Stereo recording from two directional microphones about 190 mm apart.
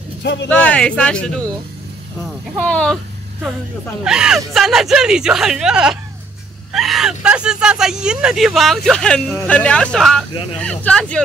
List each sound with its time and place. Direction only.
0.2 s speech: 65° left (ahead or behind)
0.5 s speech: 5° left (ahead or behind)
2.6 s speech: 5° left (ahead or behind)
4.0 s speech: 5° right (ahead or behind)